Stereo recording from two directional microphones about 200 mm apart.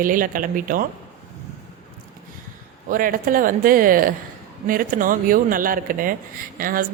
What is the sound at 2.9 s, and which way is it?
Speech, 45° right (ahead or behind).